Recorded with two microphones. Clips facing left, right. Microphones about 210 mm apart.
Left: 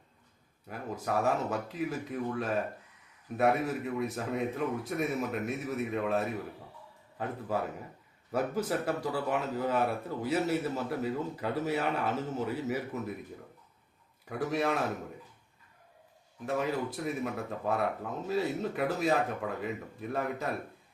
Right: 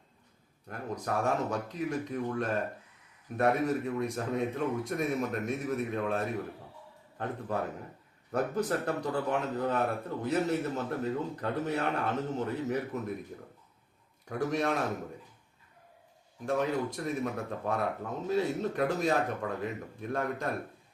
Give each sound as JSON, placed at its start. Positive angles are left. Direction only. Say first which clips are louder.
{"t": 0.7, "sound": "speech", "louder": "left 1 dB", "side_deg": 5}
{"t": 8.3, "sound": "speech", "louder": "right 1 dB", "side_deg": 5}
{"t": 14.3, "sound": "speech", "louder": "even", "side_deg": 5}
{"t": 16.5, "sound": "speech", "louder": "right 2 dB", "side_deg": 5}